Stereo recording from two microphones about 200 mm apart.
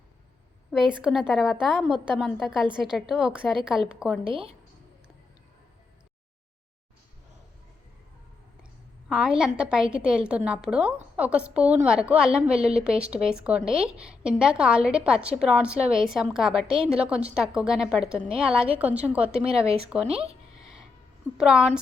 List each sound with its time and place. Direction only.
0.7 s a woman's voice: 5° right (ahead or behind)
4.2 s speech: 25° right (ahead or behind)
9.0 s a woman's voice: 5° right (ahead or behind)
20.6 s a sound: 5° right (ahead or behind)
21.3 s a woman's voice: 5° right (ahead or behind)